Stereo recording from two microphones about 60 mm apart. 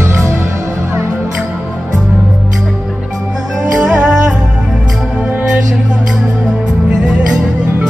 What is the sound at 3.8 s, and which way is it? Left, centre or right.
Music, centre.